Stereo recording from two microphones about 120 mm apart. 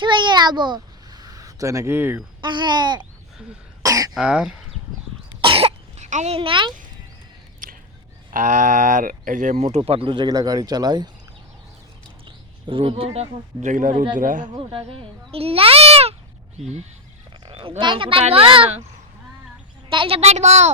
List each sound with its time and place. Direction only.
0.0 s a child's voice: 40° right (ahead or behind); by 2.2 s 15° right (ahead or behind)
2.4 s speech: 40° right (ahead or behind)
3.8 s throat clearing: 30° right (ahead or behind)
4.1 s speech: 10° right (ahead or behind)
5.4 s cough: 50° right (ahead or behind)
6.1 s a child's voice: 90° right
6.3 s speech: 45° right (ahead or behind)
8.4 s speech: 90° right; by 11.1 s 35° right (ahead or behind)
12.2 s a sound: 45° right (ahead or behind)
13.6 s speech: 90° right
14.6 s speech: 45° right (ahead or behind)
17.4 s speech: 50° right (ahead or behind)
19.9 s a woman's voice: 50° right (ahead or behind); by 20.7 s 70° right (ahead or behind)